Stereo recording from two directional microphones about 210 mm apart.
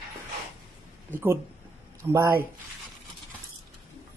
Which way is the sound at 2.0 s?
10° right (ahead or behind).